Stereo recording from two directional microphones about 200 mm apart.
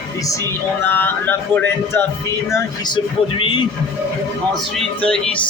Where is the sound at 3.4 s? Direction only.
25° left (ahead or behind).